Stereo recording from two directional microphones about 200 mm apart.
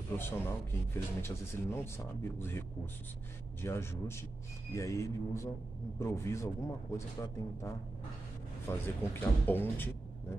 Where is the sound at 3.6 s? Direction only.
10° left (ahead or behind).